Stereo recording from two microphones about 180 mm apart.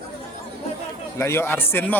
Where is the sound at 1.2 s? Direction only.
15° left (ahead or behind).